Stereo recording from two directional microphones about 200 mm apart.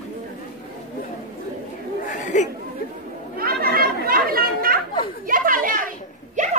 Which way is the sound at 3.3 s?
50° right (ahead or behind).